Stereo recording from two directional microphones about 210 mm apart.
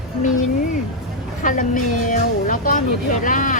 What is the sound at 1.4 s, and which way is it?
Speech, 40° left (ahead or behind).